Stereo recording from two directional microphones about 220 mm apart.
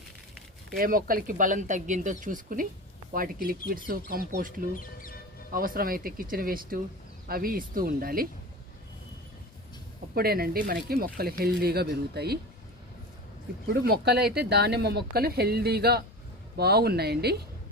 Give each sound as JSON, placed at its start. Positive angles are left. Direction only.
{"t": 0.8, "sound": "speech", "side_deg": -40}
{"t": 4.7, "sound": "speech", "side_deg": 40}
{"t": 5.5, "sound": "speech", "side_deg": -40}
{"t": 10.2, "sound": "speech", "side_deg": -45}
{"t": 13.7, "sound": "speech", "side_deg": -45}